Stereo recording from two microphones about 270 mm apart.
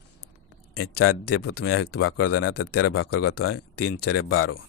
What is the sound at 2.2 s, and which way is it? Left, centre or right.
Speech, left.